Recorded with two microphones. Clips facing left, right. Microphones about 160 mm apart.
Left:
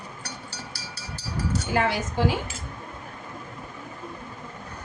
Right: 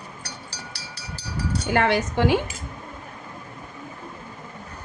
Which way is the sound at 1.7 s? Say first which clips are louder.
Right 4 dB; 70° right (ahead or behind).